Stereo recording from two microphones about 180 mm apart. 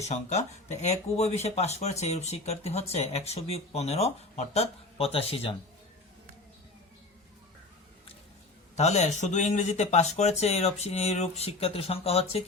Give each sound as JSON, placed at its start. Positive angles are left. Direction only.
{"t": 0.0, "sound": "speech", "side_deg": 40}
{"t": 8.7, "sound": "speech", "side_deg": 40}